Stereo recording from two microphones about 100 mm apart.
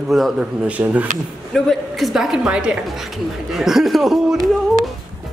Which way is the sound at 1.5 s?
Centre (ahead or behind).